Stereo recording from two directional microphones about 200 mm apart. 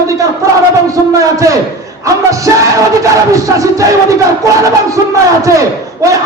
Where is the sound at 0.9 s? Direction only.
15° right (ahead or behind).